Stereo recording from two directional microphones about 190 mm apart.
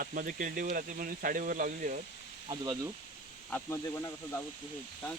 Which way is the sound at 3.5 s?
15° left (ahead or behind).